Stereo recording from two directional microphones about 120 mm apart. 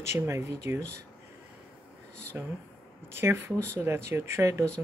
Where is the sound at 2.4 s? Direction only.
15° right (ahead or behind).